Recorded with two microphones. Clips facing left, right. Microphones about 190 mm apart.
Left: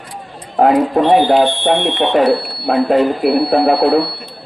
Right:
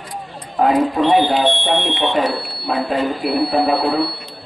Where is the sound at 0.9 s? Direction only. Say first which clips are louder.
Left 4 dB; 40° left (ahead or behind); by 4.0 s 60° left (ahead or behind).